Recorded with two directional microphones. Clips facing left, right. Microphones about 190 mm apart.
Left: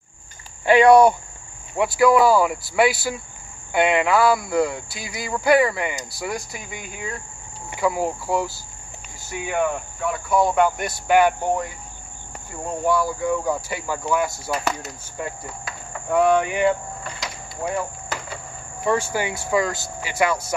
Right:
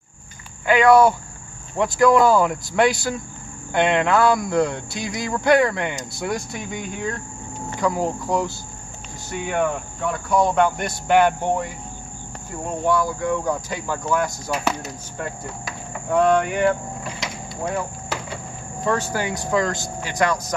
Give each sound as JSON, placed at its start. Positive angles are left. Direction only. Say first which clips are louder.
{"t": 0.7, "sound": "speech", "louder": "left 2 dB", "side_deg": 20}
{"t": 1.8, "sound": "speech", "louder": "even", "side_deg": 5}
{"t": 12.8, "sound": "speech", "louder": "even", "side_deg": 5}
{"t": 18.8, "sound": "speech", "louder": "left 1 dB", "side_deg": 10}